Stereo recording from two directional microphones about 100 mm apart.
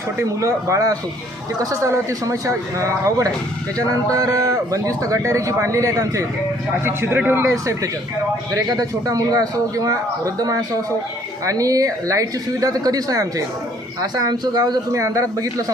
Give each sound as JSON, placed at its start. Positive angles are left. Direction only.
{"t": 0.2, "sound": "a man's voice", "side_deg": -30}